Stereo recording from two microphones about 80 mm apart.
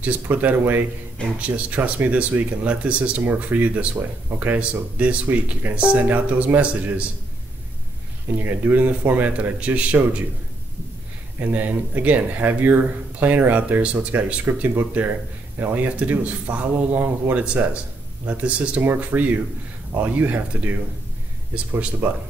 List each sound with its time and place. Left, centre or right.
0.0 s speech: right
8.4 s speech: right
11.3 s speech: right